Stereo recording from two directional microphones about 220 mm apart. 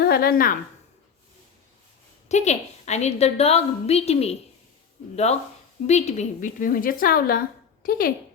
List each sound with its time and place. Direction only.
0.0 s a woman's voice: 45° left (ahead or behind)
2.3 s a woman's voice: 30° left (ahead or behind)